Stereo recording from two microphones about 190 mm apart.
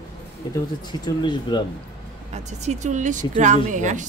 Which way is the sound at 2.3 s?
35° right (ahead or behind).